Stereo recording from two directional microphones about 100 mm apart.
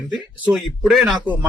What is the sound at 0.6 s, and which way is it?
Speech, centre (ahead or behind).